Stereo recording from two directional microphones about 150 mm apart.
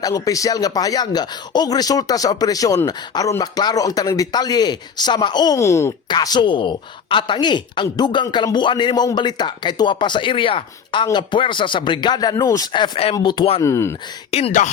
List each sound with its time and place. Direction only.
0.0 s a woman's voice: 25° left (ahead or behind)
13.6 s speech: 20° left (ahead or behind)
14.3 s speech: 40° left (ahead or behind)